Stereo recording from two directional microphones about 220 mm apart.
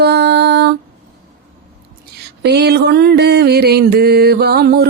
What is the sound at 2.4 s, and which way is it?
Mantra, 50° right (ahead or behind).